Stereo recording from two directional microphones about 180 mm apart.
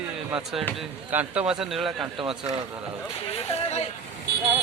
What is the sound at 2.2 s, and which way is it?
Speech, 30° right (ahead or behind).